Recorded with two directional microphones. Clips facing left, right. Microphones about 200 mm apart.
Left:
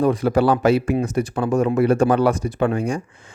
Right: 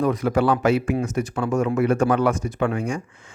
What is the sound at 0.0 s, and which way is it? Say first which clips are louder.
A man's voice: left 3 dB; 30° left (ahead or behind).